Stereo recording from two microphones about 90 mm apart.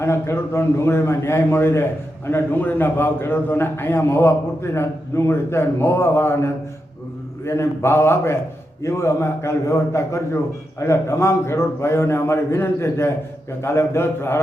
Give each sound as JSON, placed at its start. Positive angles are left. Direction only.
{"t": 0.0, "sound": "a man's voice", "side_deg": 30}